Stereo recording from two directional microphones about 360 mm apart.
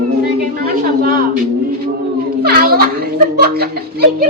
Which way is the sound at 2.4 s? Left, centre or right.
Right.